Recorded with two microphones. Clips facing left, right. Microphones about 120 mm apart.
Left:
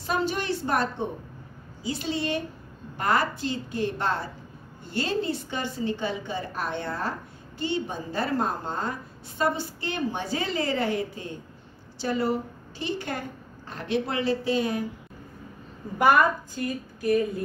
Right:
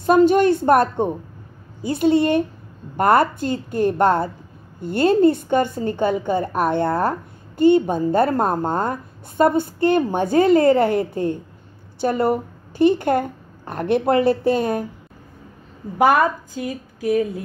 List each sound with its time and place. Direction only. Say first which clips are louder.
0.0 s a woman's voice: right 14 dB; 50° right (ahead or behind)